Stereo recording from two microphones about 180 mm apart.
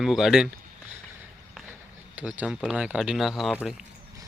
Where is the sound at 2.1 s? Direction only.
10° right (ahead or behind).